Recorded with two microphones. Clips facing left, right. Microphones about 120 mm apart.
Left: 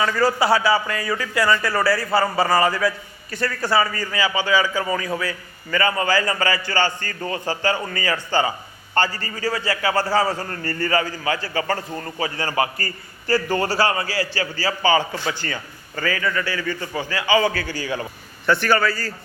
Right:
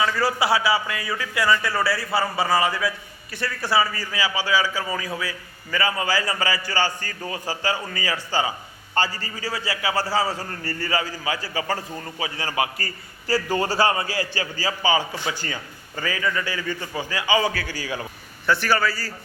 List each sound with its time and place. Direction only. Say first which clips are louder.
0.0 s a man's voice: left 3 dB; 5° right (ahead or behind)